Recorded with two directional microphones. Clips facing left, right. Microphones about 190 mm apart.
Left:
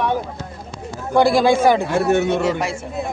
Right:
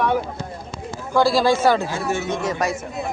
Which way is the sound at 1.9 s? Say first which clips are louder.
Left 7 dB; 65° left (ahead or behind).